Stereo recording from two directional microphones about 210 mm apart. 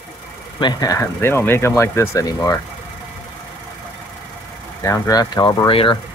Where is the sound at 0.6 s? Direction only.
20° left (ahead or behind).